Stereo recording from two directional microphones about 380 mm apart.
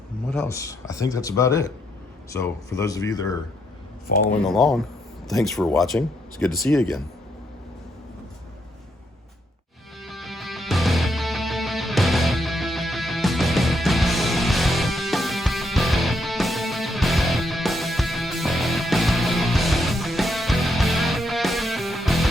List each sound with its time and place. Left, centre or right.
0.3 s a man's voice: centre
4.4 s speech: centre
10.0 s music: centre